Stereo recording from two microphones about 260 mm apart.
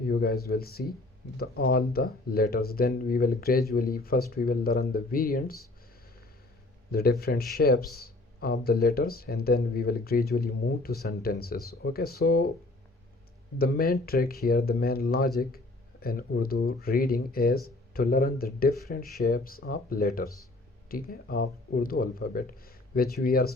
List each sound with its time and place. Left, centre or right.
0.1 s speech: left
6.9 s speech: left
13.6 s speech: left